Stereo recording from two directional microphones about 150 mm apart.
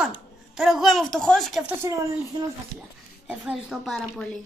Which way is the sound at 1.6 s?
20° right (ahead or behind).